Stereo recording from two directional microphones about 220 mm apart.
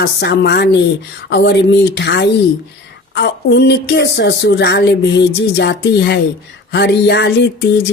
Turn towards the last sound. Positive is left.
turn(degrees=50)  # may be behind; listen again after turning